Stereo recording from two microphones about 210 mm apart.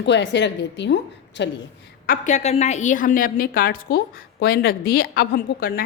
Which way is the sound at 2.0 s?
35° left (ahead or behind).